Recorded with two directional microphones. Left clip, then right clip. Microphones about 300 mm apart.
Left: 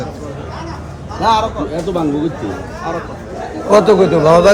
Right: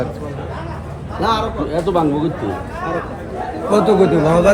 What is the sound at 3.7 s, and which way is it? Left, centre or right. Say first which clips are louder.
Speech: left 4 dB; left.